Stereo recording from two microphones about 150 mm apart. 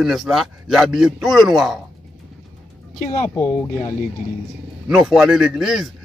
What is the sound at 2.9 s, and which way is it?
Speech, 50° left (ahead or behind).